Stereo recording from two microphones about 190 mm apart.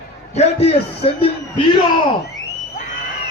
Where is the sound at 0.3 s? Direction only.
35° left (ahead or behind).